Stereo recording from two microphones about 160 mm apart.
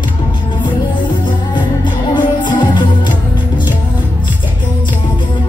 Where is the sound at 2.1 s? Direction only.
30° left (ahead or behind).